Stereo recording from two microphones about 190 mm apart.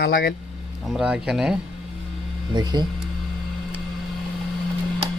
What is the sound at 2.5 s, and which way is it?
Speech, 20° right (ahead or behind).